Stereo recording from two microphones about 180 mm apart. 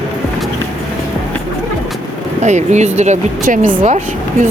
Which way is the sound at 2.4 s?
40° right (ahead or behind).